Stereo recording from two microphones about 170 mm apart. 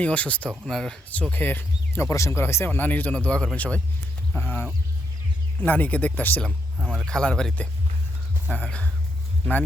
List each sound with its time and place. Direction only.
0.0 s speech: 10° left (ahead or behind)